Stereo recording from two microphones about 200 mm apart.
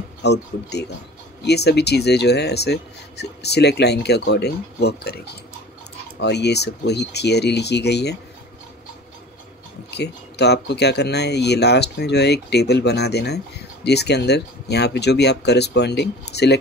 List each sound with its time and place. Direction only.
0.2 s speech: 55° left (ahead or behind)
9.8 s speech: 55° left (ahead or behind)